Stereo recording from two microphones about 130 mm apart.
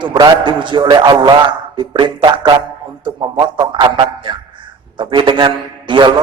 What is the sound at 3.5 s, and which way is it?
A man's voice, 35° right (ahead or behind).